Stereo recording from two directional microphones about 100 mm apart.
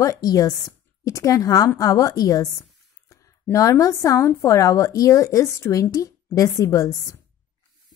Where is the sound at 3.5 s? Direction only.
35° left (ahead or behind).